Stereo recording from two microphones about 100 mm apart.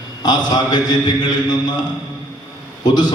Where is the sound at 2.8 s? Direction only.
45° left (ahead or behind).